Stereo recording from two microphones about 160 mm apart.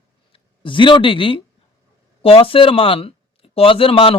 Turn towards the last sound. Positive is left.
turn(degrees=35)  # may be behind; listen again after turning